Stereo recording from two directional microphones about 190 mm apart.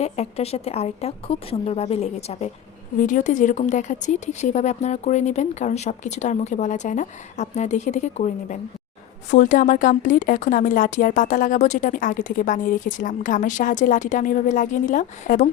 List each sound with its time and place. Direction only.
0.0 s a woman's voice: 35° left (ahead or behind)